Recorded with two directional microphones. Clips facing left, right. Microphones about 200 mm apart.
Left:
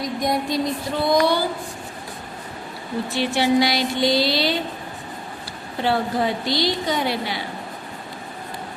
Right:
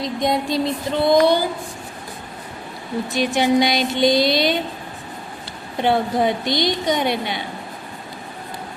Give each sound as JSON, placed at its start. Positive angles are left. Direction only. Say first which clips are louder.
{"t": 0.0, "sound": "a woman's voice", "louder": "right 2 dB", "side_deg": -25}
{"t": 3.1, "sound": "a woman's voice", "louder": "right 2 dB", "side_deg": -15}
{"t": 5.8, "sound": "a woman's voice", "louder": "right 3 dB", "side_deg": -20}